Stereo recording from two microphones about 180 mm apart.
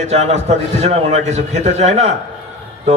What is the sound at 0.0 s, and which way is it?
A man's voice, 40° right (ahead or behind).